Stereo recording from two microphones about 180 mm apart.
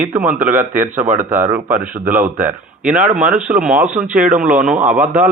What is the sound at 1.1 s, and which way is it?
Speech, 10° right (ahead or behind).